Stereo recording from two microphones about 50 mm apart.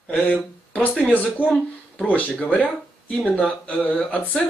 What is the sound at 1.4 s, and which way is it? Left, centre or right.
Speech, right.